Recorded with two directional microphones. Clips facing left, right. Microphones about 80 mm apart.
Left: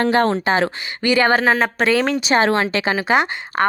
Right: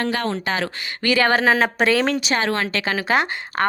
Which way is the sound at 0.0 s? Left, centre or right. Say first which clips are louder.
Left 7 dB; left.